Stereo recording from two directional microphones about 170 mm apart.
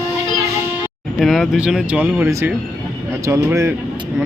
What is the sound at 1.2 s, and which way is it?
A man's voice, centre (ahead or behind).